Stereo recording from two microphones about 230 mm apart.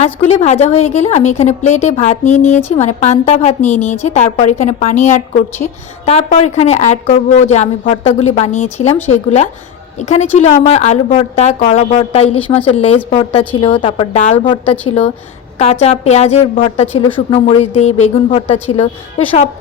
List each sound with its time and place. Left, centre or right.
0.0 s a woman's voice: left